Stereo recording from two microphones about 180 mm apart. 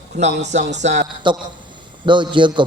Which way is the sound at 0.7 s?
75° right (ahead or behind).